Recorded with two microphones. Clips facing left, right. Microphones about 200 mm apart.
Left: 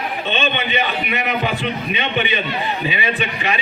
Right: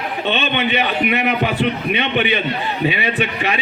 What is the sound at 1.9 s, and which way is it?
Speech, 65° right (ahead or behind).